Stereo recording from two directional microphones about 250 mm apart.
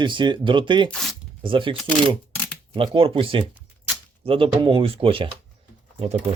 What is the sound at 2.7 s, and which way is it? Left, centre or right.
Speech, right.